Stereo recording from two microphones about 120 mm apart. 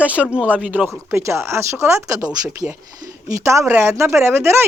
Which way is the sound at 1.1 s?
20° right (ahead or behind).